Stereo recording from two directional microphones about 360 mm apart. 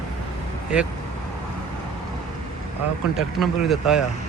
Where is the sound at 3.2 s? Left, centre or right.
Centre.